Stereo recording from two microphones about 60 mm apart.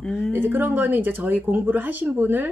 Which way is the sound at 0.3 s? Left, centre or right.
Right.